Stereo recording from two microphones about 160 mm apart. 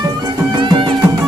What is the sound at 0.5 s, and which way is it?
Music, 30° right (ahead or behind).